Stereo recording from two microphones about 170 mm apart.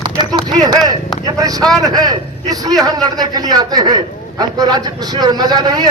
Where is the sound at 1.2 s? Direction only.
20° right (ahead or behind).